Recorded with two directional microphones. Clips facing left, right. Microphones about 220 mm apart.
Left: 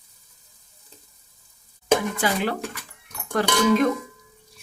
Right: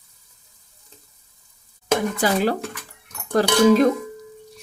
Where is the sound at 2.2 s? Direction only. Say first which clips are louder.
Right 4 dB; 40° right (ahead or behind).